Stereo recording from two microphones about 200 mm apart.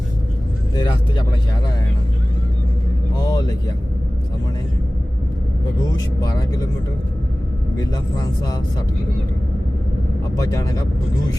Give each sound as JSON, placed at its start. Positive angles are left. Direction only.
{"t": 0.8, "sound": "speech", "side_deg": 20}
{"t": 3.2, "sound": "vehicle", "side_deg": 20}
{"t": 6.1, "sound": "speech", "side_deg": 20}
{"t": 7.8, "sound": "speech", "side_deg": 20}
{"t": 10.5, "sound": "speech", "side_deg": 15}